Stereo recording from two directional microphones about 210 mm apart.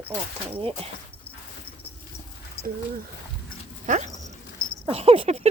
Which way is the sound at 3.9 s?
40° right (ahead or behind).